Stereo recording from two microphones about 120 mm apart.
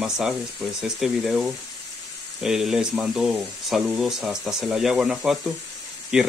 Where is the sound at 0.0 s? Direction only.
5° right (ahead or behind).